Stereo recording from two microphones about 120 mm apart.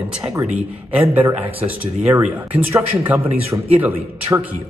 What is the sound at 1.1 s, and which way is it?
Speech, 15° right (ahead or behind).